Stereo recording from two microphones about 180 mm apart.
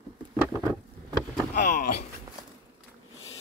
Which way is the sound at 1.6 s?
45° left (ahead or behind).